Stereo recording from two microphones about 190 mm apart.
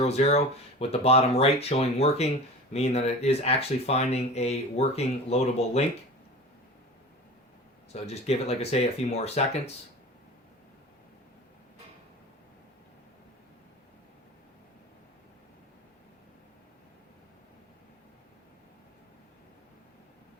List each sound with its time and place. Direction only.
0.0 s speech: 35° left (ahead or behind)
7.9 s speech: 35° left (ahead or behind)